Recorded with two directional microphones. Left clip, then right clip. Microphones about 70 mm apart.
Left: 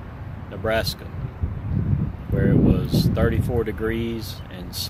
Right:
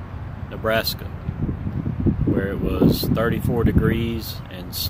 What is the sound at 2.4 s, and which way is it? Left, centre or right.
Speech, right.